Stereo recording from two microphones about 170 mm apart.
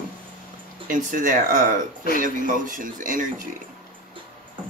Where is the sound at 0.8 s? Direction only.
50° right (ahead or behind).